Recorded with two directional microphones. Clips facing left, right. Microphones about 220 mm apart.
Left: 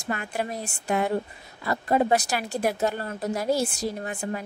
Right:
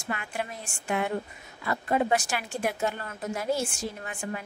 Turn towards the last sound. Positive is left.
turn(degrees=40)  # may be behind; listen again after turning